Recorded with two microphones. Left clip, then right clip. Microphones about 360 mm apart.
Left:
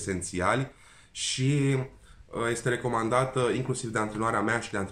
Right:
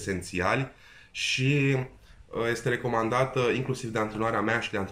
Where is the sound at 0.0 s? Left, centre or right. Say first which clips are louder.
Even; centre.